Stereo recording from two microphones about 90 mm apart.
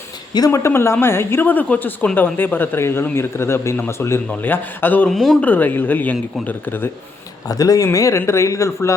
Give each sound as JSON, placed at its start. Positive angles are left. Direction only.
{"t": 0.5, "sound": "speech", "side_deg": 30}
{"t": 5.0, "sound": "speech", "side_deg": 0}
{"t": 5.4, "sound": "speech", "side_deg": 20}
{"t": 7.4, "sound": "speech", "side_deg": 40}